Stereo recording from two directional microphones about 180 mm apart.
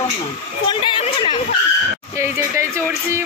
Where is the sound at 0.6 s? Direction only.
25° left (ahead or behind).